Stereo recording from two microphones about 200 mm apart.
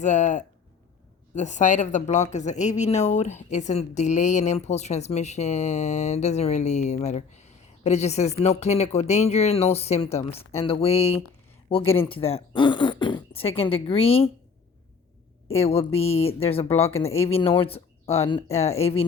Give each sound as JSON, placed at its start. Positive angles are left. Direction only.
{"t": 0.0, "sound": "a woman's voice", "side_deg": 35}
{"t": 15.5, "sound": "speech", "side_deg": 30}